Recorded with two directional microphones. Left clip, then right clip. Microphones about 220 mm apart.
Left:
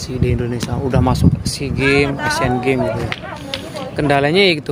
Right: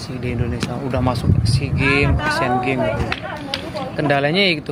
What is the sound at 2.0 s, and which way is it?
Speech, 35° left (ahead or behind).